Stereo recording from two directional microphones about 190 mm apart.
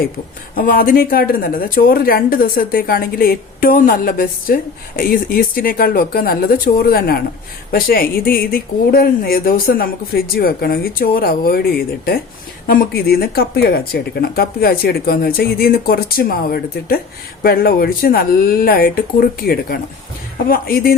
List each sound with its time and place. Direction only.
0.5 s speech: 45° left (ahead or behind)